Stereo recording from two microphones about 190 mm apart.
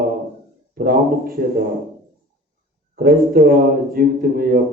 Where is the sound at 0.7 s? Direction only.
50° right (ahead or behind).